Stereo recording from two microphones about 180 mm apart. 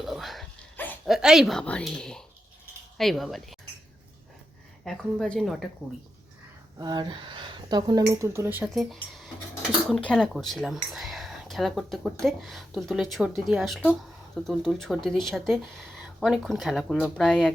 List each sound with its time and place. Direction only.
0.0 s a sound: centre (ahead or behind)
1.0 s speech: centre (ahead or behind)
4.9 s speech: centre (ahead or behind)
6.7 s speech: 20° right (ahead or behind); by 17.5 s 5° left (ahead or behind)